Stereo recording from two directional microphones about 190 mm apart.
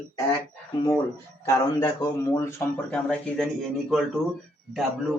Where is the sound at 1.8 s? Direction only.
15° left (ahead or behind).